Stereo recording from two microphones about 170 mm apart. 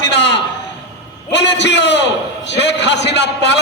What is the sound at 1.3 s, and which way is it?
A man's voice, 90° left.